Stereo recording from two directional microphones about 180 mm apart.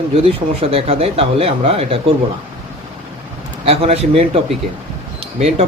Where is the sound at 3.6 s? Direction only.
35° right (ahead or behind).